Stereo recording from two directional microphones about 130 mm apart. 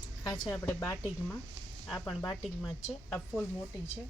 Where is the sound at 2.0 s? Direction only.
Centre (ahead or behind).